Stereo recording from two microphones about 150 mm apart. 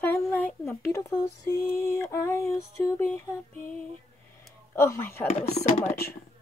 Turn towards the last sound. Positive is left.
turn(degrees=45)  # may be behind; listen again after turning